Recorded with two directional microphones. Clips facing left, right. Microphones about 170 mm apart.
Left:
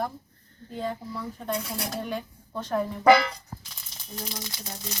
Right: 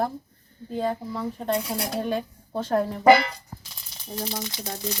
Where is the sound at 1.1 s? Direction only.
25° right (ahead or behind).